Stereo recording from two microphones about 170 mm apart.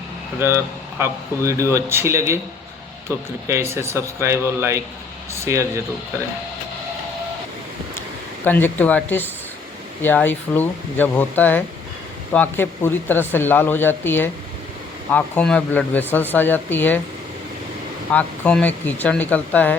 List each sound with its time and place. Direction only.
0.3 s speech: 15° right (ahead or behind)
8.4 s speech: 10° left (ahead or behind)
18.1 s speech: 10° left (ahead or behind)